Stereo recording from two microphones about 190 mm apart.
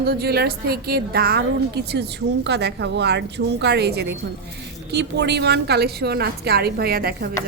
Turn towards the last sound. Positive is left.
turn(degrees=-55)  # may be behind; listen again after turning